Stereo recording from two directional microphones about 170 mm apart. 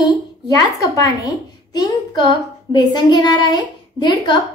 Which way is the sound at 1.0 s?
20° left (ahead or behind).